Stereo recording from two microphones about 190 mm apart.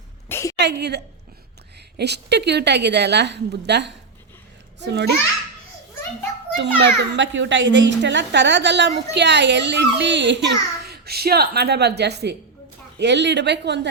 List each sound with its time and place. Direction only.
0.3 s a sound: 15° left (ahead or behind)
0.6 s a woman's voice: 60° right (ahead or behind)
6.6 s a child's voice: 65° right (ahead or behind)